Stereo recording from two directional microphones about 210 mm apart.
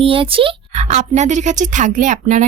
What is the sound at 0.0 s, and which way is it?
Speech, 25° right (ahead or behind).